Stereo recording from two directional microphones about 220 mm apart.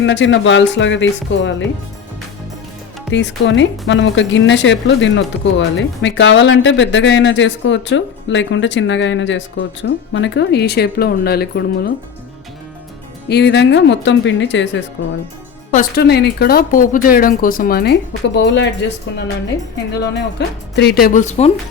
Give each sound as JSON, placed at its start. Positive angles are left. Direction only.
{"t": 0.0, "sound": "speech", "side_deg": 55}
{"t": 3.1, "sound": "speech", "side_deg": 55}
{"t": 13.2, "sound": "speech", "side_deg": 50}
{"t": 15.7, "sound": "speech", "side_deg": 40}